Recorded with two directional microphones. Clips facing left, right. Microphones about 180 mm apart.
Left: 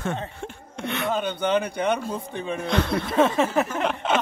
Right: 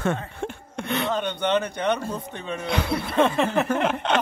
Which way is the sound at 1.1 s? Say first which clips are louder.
Left 1 dB; 5° left (ahead or behind).